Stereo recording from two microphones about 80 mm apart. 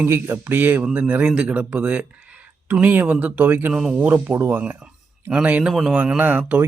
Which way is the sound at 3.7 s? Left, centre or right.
Centre.